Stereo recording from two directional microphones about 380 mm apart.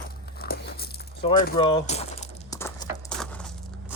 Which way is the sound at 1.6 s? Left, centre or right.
Centre.